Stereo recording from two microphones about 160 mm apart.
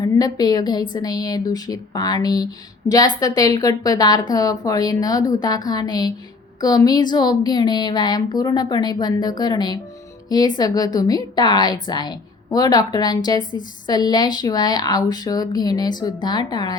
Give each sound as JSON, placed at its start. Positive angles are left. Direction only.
{"t": 0.0, "sound": "a woman's voice", "side_deg": 25}